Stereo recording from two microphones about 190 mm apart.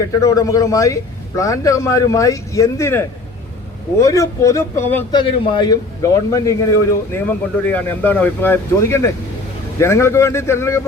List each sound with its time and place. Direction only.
0.2 s speech: 15° left (ahead or behind)
5.1 s a man's voice: 25° left (ahead or behind)